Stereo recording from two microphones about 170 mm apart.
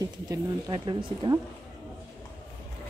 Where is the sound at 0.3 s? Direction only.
25° right (ahead or behind).